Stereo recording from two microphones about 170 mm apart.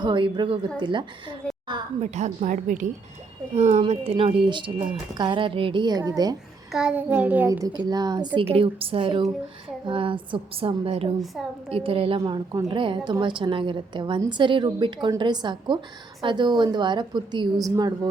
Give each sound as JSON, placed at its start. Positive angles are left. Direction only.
{"t": 0.0, "sound": "a woman's voice", "side_deg": -25}
{"t": 2.0, "sound": "a woman's voice", "side_deg": -40}
{"t": 6.7, "sound": "a child's voice", "side_deg": -5}
{"t": 7.9, "sound": "a woman's voice", "side_deg": -25}